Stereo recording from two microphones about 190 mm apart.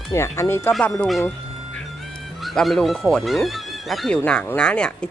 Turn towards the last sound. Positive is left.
turn(degrees=5)  # may be behind; listen again after turning